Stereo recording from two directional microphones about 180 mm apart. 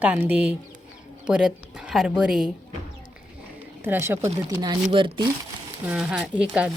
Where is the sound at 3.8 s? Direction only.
10° right (ahead or behind); by 5.2 s 30° right (ahead or behind).